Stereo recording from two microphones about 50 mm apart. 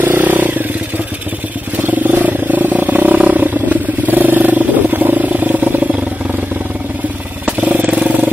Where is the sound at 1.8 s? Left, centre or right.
Right.